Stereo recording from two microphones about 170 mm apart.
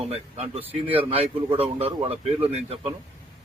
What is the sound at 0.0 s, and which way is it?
Speech, 35° right (ahead or behind).